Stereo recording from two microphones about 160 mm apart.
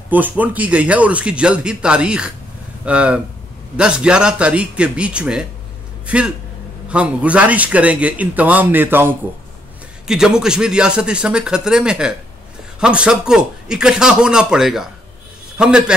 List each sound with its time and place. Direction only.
0.1 s a man's voice: 10° right (ahead or behind)